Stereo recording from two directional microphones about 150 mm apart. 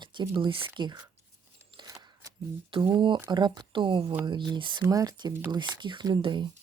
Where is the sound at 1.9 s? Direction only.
25° right (ahead or behind).